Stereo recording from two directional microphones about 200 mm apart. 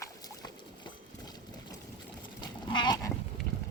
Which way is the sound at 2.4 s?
20° left (ahead or behind).